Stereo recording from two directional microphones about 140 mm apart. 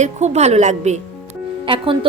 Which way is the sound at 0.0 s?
55° right (ahead or behind).